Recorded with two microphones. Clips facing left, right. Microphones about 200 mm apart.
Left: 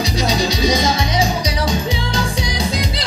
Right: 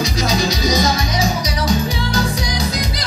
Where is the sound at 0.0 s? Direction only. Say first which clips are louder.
Even; 30° left (ahead or behind).